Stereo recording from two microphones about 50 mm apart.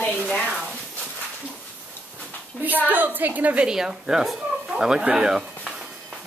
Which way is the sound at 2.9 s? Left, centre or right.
Right.